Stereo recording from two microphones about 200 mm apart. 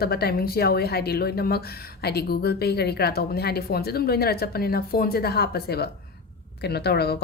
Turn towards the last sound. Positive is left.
turn(degrees=55)  # may be behind; listen again after turning